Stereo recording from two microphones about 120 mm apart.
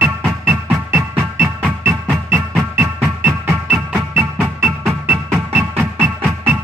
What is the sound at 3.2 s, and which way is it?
Music, 15° right (ahead or behind).